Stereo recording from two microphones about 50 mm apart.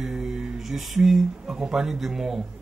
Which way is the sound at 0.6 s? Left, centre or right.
Centre.